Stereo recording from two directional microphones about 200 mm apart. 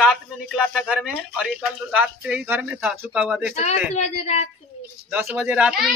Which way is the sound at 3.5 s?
35° left (ahead or behind).